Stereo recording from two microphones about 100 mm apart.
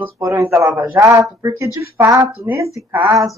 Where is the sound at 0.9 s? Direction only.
35° right (ahead or behind).